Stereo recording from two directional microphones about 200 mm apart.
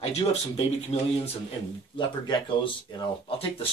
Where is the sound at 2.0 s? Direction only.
25° left (ahead or behind).